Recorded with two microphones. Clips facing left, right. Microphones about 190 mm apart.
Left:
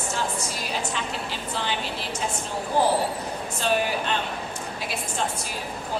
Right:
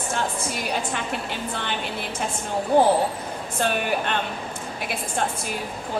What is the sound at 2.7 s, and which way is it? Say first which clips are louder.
A woman's voice: right 4 dB; 55° right (ahead or behind).